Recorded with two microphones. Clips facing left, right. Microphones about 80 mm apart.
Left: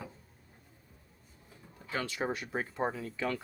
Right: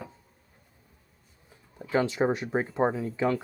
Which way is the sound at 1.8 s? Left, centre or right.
Right.